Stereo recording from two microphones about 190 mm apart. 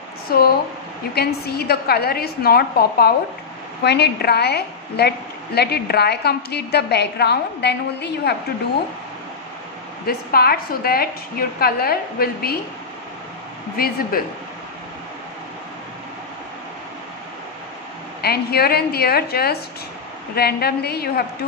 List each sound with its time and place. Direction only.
0.3 s a woman's voice: 55° left (ahead or behind)
10.0 s a woman's voice: 55° left (ahead or behind)
13.7 s a woman's voice: 50° left (ahead or behind)
18.2 s a woman's voice: 55° left (ahead or behind)